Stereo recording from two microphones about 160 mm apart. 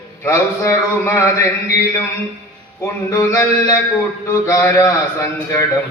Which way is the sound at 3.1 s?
20° left (ahead or behind).